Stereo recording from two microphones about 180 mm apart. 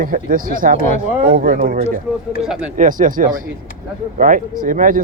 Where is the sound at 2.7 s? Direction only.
45° right (ahead or behind).